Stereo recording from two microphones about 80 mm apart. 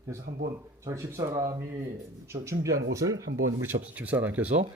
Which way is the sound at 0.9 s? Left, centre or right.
Right.